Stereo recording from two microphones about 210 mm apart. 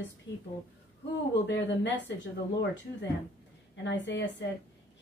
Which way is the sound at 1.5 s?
60° left (ahead or behind).